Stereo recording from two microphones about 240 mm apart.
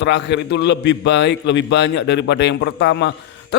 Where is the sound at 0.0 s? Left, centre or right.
Left.